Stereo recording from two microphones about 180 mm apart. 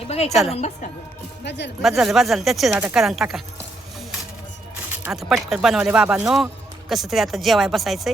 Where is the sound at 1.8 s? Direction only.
Centre (ahead or behind).